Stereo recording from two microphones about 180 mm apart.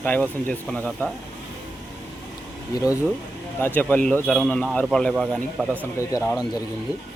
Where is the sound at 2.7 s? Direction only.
20° left (ahead or behind); by 5.8 s 5° left (ahead or behind).